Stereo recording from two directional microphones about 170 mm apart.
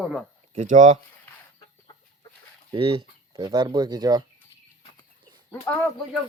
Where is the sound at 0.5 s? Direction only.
45° right (ahead or behind).